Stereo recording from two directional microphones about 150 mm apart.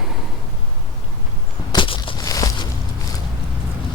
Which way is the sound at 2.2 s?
25° left (ahead or behind).